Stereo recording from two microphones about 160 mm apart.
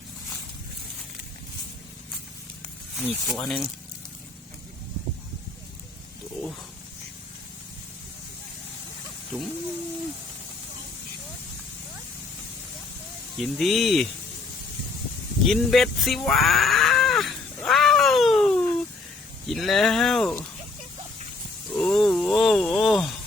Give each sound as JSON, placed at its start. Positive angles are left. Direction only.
{"t": 3.1, "sound": "speech", "side_deg": 0}
{"t": 9.3, "sound": "a sound", "side_deg": 5}
{"t": 13.4, "sound": "speech", "side_deg": 0}
{"t": 15.4, "sound": "cat", "side_deg": 0}
{"t": 19.5, "sound": "speech", "side_deg": 0}
{"t": 21.7, "sound": "a sound", "side_deg": 5}